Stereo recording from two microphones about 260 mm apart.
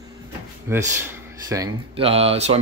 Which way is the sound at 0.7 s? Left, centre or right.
Centre.